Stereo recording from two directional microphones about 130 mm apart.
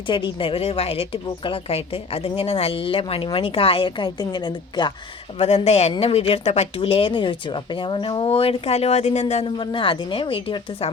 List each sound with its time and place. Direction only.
0.1 s speech: 40° left (ahead or behind)
5.4 s speech: 55° left (ahead or behind)